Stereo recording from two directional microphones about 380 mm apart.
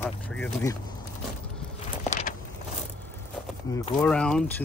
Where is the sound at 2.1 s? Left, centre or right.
Centre.